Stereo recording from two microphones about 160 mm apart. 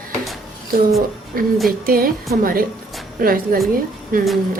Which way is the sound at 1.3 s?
60° right (ahead or behind).